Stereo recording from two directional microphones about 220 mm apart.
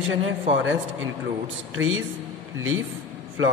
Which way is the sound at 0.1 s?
60° right (ahead or behind).